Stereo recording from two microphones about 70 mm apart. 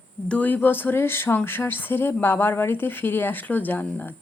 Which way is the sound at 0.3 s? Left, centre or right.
Left.